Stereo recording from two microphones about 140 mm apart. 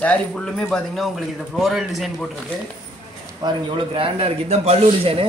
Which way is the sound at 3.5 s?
40° right (ahead or behind).